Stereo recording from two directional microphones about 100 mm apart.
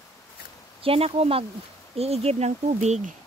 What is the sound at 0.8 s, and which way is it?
Speech, 75° right (ahead or behind).